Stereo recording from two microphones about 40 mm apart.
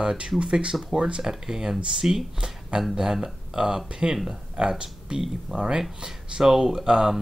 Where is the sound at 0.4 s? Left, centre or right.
Right.